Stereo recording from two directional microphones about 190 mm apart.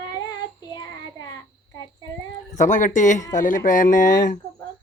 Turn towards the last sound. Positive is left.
turn(degrees=60)  # may be behind; listen again after turning